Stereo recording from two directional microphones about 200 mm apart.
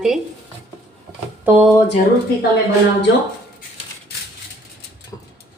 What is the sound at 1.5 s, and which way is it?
Speech, 10° right (ahead or behind).